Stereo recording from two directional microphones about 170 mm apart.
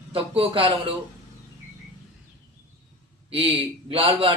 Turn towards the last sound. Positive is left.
turn(degrees=-30)  # may be behind; listen again after turning